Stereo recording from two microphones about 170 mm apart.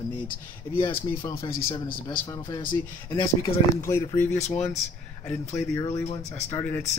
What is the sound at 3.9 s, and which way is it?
Speech, 15° left (ahead or behind).